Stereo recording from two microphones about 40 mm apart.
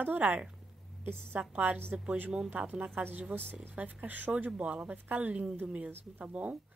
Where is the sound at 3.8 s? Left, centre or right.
Right.